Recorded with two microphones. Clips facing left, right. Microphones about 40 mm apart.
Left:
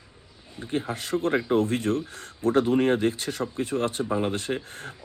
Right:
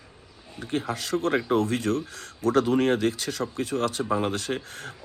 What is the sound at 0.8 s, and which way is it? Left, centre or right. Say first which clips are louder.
Speech: even; left.